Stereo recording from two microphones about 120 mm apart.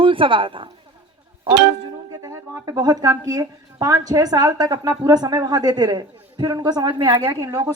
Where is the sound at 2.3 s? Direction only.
30° right (ahead or behind).